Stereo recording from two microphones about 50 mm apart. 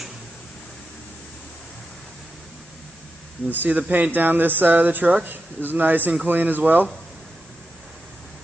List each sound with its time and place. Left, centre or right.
3.4 s speech: right